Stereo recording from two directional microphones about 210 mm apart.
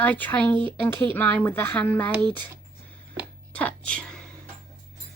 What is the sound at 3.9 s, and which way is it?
Speech, 5° left (ahead or behind).